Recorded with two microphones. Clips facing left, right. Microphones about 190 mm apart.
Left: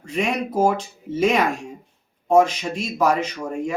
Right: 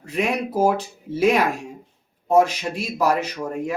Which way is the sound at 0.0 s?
5° right (ahead or behind).